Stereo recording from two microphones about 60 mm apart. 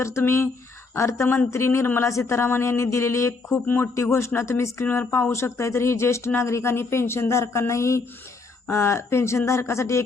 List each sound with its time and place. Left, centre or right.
0.0 s speech: left
3.5 s speech: left
3.9 s speech: left